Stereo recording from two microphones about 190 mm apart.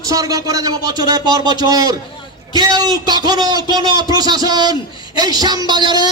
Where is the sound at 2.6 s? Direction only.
20° right (ahead or behind).